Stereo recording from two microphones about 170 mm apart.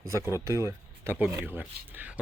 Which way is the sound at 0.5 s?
15° right (ahead or behind).